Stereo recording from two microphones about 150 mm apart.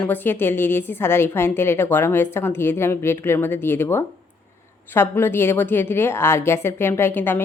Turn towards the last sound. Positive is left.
turn(degrees=15)  # may be behind; listen again after turning